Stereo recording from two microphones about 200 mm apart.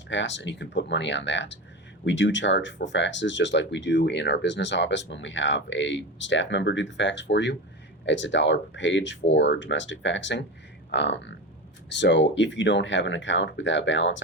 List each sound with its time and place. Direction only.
0.1 s speech: 65° left (ahead or behind)